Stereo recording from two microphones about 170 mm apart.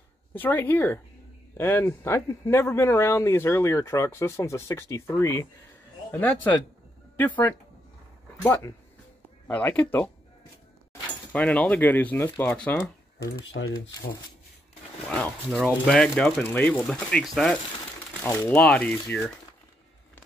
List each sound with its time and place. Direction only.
0.3 s speech: 10° left (ahead or behind)
7.2 s speech: 10° left (ahead or behind)
11.3 s speech: 10° left (ahead or behind)
13.5 s speech: 80° left
15.0 s speech: 5° left (ahead or behind)
18.2 s speech: 15° left (ahead or behind)